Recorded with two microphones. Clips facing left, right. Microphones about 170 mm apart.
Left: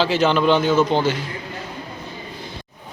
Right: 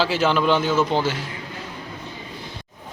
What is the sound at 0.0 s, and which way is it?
A man's voice, 5° right (ahead or behind).